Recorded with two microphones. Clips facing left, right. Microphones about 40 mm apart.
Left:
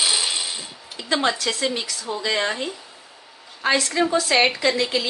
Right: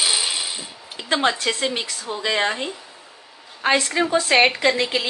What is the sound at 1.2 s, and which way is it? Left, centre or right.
A woman's voice, right.